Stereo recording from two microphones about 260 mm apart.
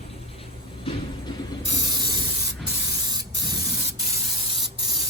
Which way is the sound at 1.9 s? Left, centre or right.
Centre.